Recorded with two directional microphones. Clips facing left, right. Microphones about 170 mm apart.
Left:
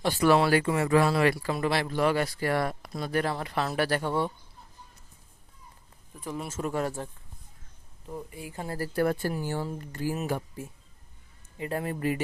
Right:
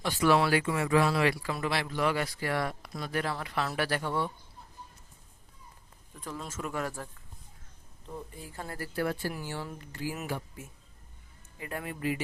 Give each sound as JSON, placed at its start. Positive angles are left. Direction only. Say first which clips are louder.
{"t": 0.0, "sound": "speech", "louder": "left 3 dB", "side_deg": 35}
{"t": 3.8, "sound": "speech", "louder": "left 5 dB", "side_deg": 50}
{"t": 4.0, "sound": "speech", "louder": "left 4 dB", "side_deg": 30}
{"t": 6.1, "sound": "a woman's voice", "louder": "left 4 dB", "side_deg": 10}
{"t": 6.5, "sound": "speech", "louder": "left 5 dB", "side_deg": 30}
{"t": 8.0, "sound": "a woman's voice", "louder": "left 4 dB", "side_deg": 10}
{"t": 8.8, "sound": "speech", "louder": "left 5 dB", "side_deg": 45}
{"t": 10.6, "sound": "speech", "louder": "left 7 dB", "side_deg": 35}